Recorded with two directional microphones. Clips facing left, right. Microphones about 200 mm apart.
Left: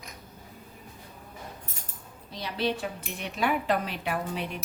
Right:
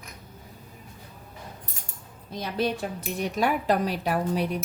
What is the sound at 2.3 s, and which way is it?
Speech, 45° right (ahead or behind).